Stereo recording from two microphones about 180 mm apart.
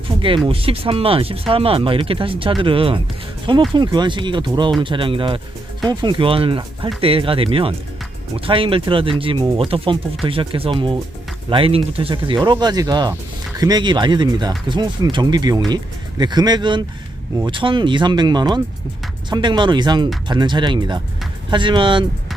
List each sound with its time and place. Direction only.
0.4 s speech: 30° right (ahead or behind)